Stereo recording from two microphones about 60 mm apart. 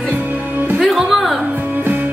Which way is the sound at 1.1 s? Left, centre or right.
Centre.